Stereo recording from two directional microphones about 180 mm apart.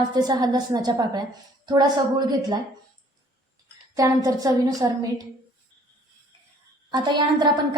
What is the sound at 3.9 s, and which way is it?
A woman's voice, 20° right (ahead or behind).